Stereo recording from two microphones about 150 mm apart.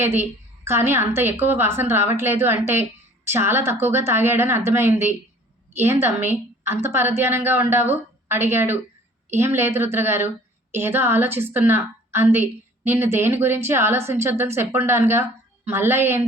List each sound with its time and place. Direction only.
0.0 s a woman's voice: 15° right (ahead or behind)